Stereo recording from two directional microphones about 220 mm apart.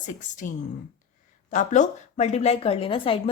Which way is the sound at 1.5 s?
35° left (ahead or behind).